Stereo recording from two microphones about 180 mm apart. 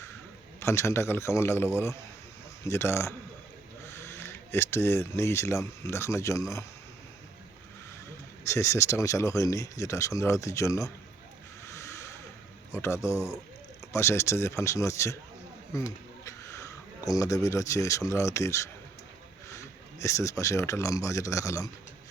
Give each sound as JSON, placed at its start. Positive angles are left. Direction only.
{"t": 0.6, "sound": "speech", "side_deg": 15}
{"t": 8.4, "sound": "speech", "side_deg": 15}
{"t": 11.6, "sound": "a sound", "side_deg": 15}
{"t": 12.7, "sound": "speech", "side_deg": 15}
{"t": 16.2, "sound": "speech", "side_deg": 15}